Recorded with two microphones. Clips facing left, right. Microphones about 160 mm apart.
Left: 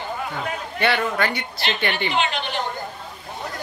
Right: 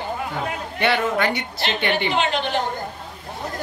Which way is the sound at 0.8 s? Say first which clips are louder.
Right 1 dB; 20° right (ahead or behind).